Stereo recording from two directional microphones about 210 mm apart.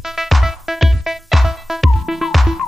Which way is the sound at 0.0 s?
Centre (ahead or behind).